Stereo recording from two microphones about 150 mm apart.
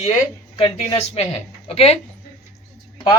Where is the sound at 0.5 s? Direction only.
30° left (ahead or behind).